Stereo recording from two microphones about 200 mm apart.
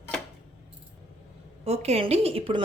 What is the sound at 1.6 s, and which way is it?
A woman's voice, 30° right (ahead or behind).